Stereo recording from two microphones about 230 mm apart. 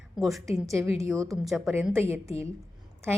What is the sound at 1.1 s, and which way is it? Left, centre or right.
Speech, centre.